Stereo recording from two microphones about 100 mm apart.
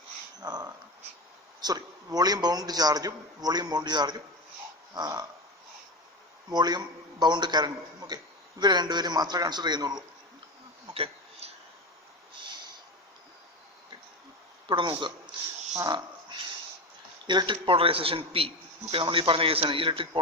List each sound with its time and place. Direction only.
0.3 s a man's voice: 40° right (ahead or behind)
6.5 s a man's voice: 45° right (ahead or behind)
10.9 s a sound: 80° right
14.7 s a man's voice: 50° right (ahead or behind)
15.9 s a sound: 45° right (ahead or behind)
17.2 s a man's voice: 50° right (ahead or behind)